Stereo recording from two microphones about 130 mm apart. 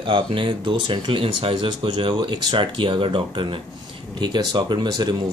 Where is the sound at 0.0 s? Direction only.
40° right (ahead or behind).